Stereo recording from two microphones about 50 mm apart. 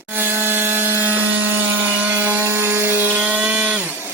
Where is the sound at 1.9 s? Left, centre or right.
Right.